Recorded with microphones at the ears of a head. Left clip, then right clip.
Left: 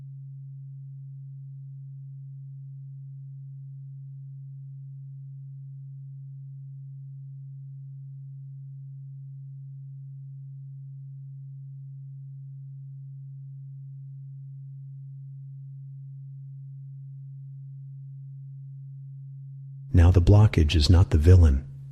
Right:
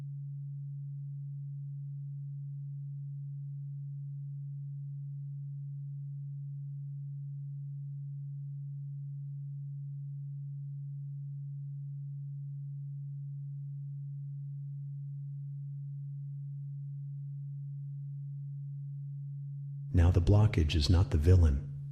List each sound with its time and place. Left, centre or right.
19.9 s speech: left